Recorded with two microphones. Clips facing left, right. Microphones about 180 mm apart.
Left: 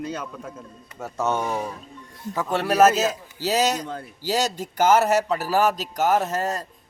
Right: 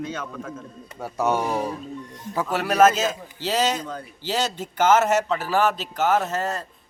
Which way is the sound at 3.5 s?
40° left (ahead or behind).